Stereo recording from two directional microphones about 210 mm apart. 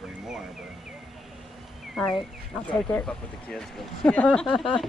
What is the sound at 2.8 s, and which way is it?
Speech, 5° left (ahead or behind).